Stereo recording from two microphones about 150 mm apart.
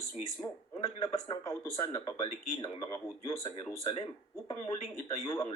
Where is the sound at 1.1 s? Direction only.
25° left (ahead or behind).